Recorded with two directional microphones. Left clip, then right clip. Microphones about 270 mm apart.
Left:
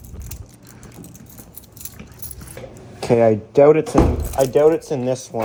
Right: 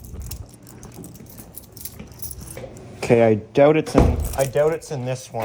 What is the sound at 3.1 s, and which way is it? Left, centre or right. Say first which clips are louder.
Speech: left 1 dB; centre.